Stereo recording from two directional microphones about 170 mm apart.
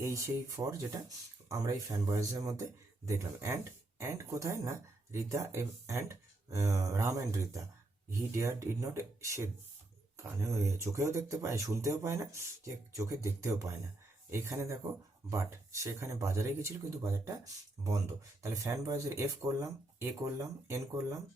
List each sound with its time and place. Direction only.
0.0 s speech: 20° right (ahead or behind)